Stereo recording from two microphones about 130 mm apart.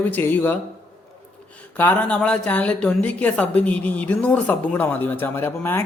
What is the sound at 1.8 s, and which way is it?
A woman's voice, 15° left (ahead or behind).